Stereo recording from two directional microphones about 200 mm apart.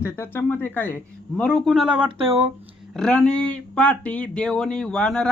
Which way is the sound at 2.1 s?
25° right (ahead or behind).